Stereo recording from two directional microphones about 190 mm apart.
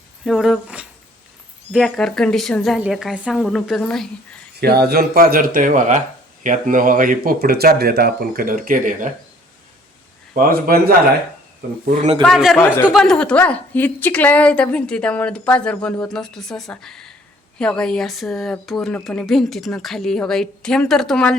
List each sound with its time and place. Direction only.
0.3 s a woman's voice: centre (ahead or behind)
4.6 s speech: 55° right (ahead or behind)
10.3 s speech: 50° right (ahead or behind)
11.9 s a man's voice: 35° right (ahead or behind)
12.2 s a woman's voice: centre (ahead or behind)